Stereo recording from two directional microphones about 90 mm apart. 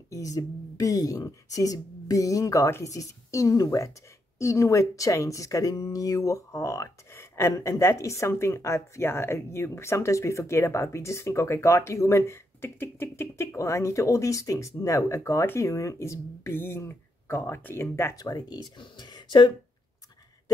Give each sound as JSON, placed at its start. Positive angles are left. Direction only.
{"t": 0.1, "sound": "speech", "side_deg": 40}
{"t": 18.1, "sound": "speech", "side_deg": 50}